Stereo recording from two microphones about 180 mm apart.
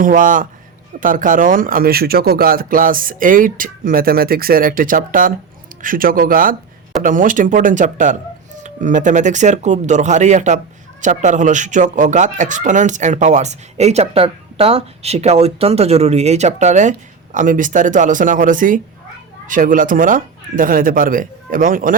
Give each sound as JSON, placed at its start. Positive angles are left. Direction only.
{"t": 0.0, "sound": "speech", "side_deg": -50}